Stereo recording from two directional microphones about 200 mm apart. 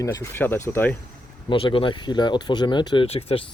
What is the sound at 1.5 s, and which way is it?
Speech, 25° left (ahead or behind).